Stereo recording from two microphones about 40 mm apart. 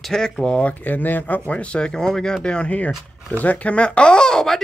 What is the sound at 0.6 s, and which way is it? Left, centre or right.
Speech, left.